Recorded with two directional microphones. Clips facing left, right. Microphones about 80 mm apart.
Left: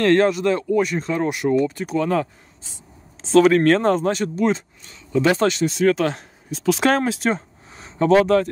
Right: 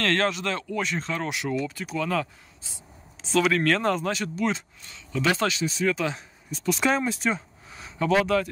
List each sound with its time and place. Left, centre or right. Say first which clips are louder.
0.0 s speech: left 9 dB; centre
1.4 s speech: left 9 dB; left
5.8 s speech: left 8 dB; left
7.3 s a sound: left 4 dB; left